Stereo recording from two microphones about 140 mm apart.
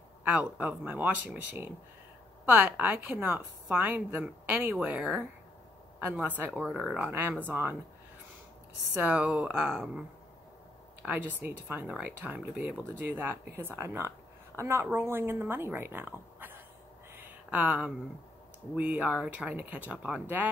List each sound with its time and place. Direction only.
0.2 s speech: 10° right (ahead or behind)
9.0 s speech: 5° right (ahead or behind)
11.0 s speech: 10° right (ahead or behind)
17.1 s a sound: 15° right (ahead or behind)
18.8 s speech: 10° right (ahead or behind)